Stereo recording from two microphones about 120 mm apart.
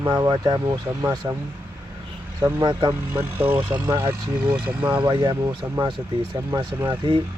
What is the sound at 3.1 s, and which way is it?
Speech, 20° right (ahead or behind).